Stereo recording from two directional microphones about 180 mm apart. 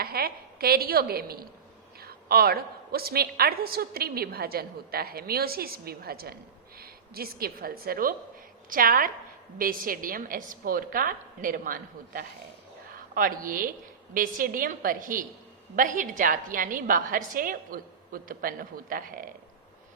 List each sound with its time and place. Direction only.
0.0 s a woman's voice: 55° right (ahead or behind)